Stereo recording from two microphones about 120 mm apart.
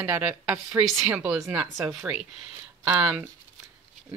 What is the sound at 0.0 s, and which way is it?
Speech, 15° right (ahead or behind).